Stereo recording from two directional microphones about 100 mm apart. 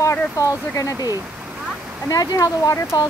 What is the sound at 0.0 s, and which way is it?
Speech, 35° left (ahead or behind).